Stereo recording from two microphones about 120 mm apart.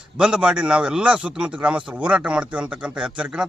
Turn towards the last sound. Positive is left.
turn(degrees=-10)  # may be behind; listen again after turning